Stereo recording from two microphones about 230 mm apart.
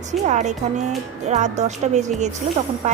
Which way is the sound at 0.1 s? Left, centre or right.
Right.